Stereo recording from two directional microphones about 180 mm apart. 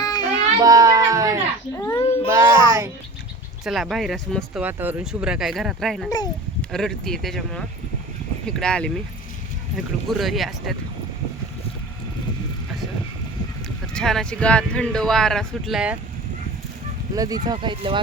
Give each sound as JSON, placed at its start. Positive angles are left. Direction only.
{"t": 0.0, "sound": "child singing", "side_deg": 20}
{"t": 0.6, "sound": "speech", "side_deg": -20}
{"t": 1.7, "sound": "a child's voice", "side_deg": 15}
{"t": 2.0, "sound": "a sound", "side_deg": 30}
{"t": 3.6, "sound": "speech", "side_deg": 0}
{"t": 4.6, "sound": "speech", "side_deg": -10}
{"t": 6.1, "sound": "speech", "side_deg": 20}
{"t": 6.6, "sound": "speech", "side_deg": 5}
{"t": 13.9, "sound": "speech", "side_deg": 5}
{"t": 17.2, "sound": "speech", "side_deg": -20}